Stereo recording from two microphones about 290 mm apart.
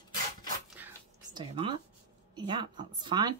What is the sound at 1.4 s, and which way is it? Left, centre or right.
A woman's voice, centre.